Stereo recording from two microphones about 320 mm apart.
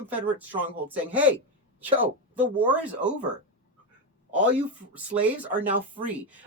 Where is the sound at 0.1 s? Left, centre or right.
Centre.